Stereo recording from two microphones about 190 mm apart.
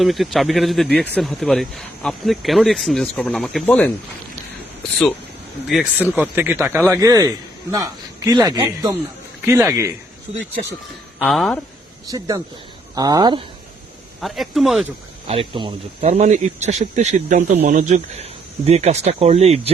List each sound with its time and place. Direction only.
0.0 s speech: centre (ahead or behind)
5.6 s a man's voice: centre (ahead or behind)
11.2 s speech: centre (ahead or behind)
13.0 s speech: 20° right (ahead or behind)
14.2 s speech: centre (ahead or behind)
15.3 s speech: 25° right (ahead or behind)